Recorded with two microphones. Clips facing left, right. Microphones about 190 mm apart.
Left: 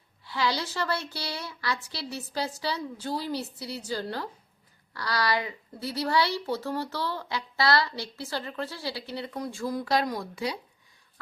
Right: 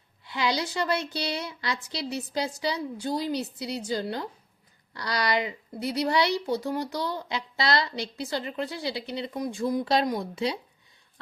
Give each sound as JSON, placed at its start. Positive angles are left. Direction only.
{"t": 0.3, "sound": "speech", "side_deg": -20}